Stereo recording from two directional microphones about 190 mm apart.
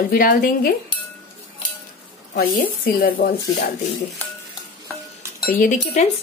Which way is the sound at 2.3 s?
50° left (ahead or behind).